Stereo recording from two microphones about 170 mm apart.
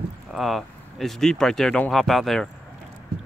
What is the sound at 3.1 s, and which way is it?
Clip-clop, 75° right (ahead or behind).